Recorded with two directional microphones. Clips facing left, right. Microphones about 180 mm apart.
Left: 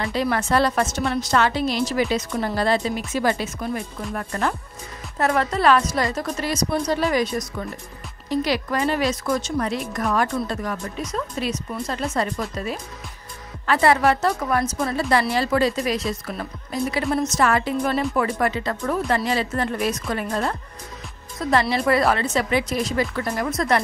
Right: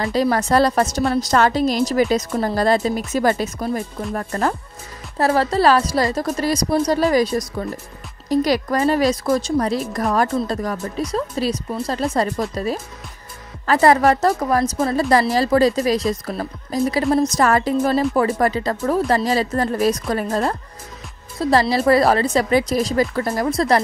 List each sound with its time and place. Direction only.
0.0 s a woman's voice: 40° right (ahead or behind)